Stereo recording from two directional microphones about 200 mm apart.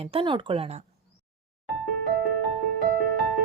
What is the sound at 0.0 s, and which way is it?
Speech, 30° right (ahead or behind).